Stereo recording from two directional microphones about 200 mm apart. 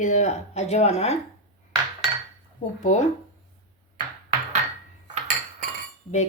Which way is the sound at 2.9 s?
40° left (ahead or behind).